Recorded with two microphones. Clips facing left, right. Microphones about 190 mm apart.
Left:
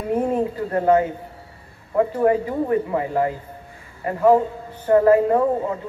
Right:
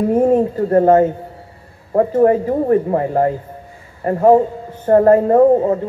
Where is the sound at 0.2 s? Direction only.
40° right (ahead or behind).